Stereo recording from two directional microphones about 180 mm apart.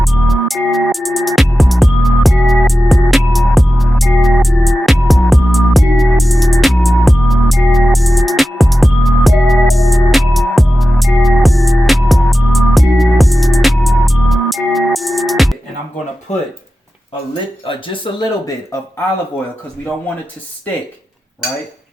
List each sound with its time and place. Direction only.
0.0 s music: centre (ahead or behind)
17.7 s speech: 25° left (ahead or behind)